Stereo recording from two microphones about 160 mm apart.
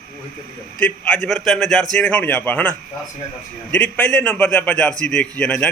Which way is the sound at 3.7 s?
10° left (ahead or behind).